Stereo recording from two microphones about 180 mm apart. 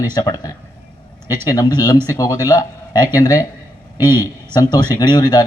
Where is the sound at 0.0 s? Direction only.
20° left (ahead or behind).